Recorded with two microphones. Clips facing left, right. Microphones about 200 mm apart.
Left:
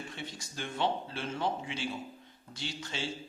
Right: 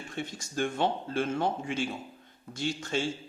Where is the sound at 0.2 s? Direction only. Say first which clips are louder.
Right 15 dB; 50° right (ahead or behind).